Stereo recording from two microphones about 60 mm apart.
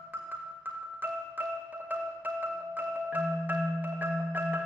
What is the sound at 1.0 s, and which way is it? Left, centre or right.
Marimba, right.